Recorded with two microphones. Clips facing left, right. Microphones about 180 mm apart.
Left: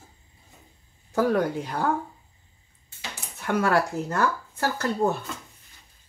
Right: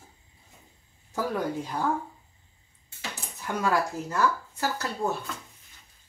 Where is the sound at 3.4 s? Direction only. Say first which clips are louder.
Left 4 dB; 70° left (ahead or behind).